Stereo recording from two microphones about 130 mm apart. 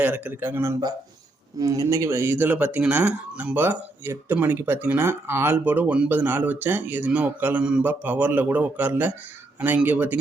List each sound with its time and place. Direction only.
0.0 s speech: 15° right (ahead or behind)